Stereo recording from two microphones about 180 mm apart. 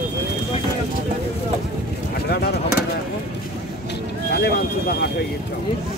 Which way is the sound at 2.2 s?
65° left (ahead or behind).